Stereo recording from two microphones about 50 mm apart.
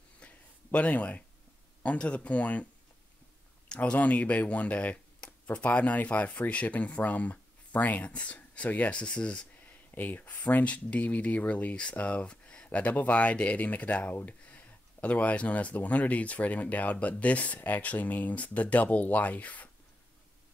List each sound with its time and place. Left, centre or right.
0.2 s a sound: left
0.7 s speech: left
9.8 s speech: left